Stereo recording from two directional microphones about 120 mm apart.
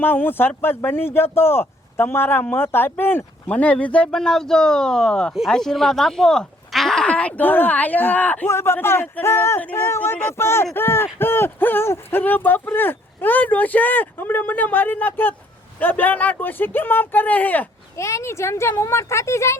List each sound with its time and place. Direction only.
0.0 s speech: 15° left (ahead or behind)